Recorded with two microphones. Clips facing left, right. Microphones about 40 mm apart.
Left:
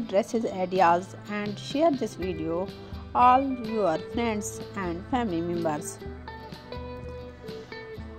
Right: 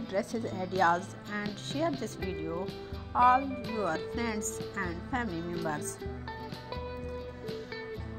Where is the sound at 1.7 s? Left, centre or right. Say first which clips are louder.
Left 9 dB; left.